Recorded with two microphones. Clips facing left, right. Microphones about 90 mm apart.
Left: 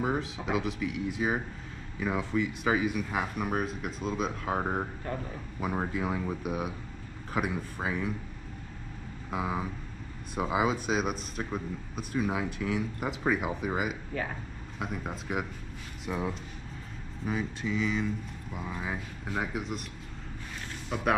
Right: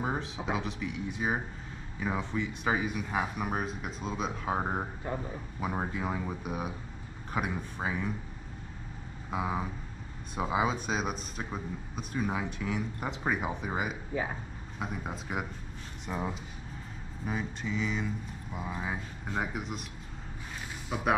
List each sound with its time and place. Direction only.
0.0 s a man's voice: centre (ahead or behind)
5.0 s a man's voice: 10° right (ahead or behind)
5.6 s a man's voice: centre (ahead or behind)
9.3 s a man's voice: centre (ahead or behind)
14.1 s a man's voice: 15° right (ahead or behind)
14.8 s a man's voice: centre (ahead or behind)
20.9 s a man's voice: centre (ahead or behind)